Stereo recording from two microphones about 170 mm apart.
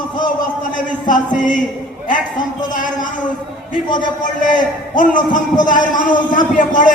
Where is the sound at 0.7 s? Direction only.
50° left (ahead or behind).